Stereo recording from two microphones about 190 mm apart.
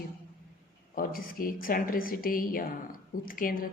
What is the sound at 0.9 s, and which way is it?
A woman's voice, 50° left (ahead or behind).